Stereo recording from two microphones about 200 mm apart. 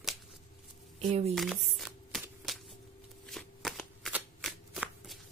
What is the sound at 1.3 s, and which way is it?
Speech, centre (ahead or behind).